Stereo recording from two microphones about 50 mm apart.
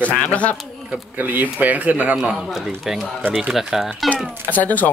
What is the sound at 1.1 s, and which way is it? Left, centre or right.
Speech, right.